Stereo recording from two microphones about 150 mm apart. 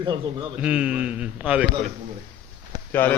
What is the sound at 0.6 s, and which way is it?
Speech, 5° right (ahead or behind).